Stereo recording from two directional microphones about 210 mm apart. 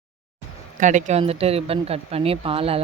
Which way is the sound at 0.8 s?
35° right (ahead or behind).